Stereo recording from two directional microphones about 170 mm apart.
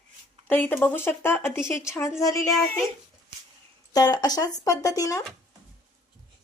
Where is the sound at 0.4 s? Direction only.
10° left (ahead or behind).